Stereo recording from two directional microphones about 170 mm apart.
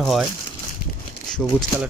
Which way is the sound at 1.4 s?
Centre (ahead or behind).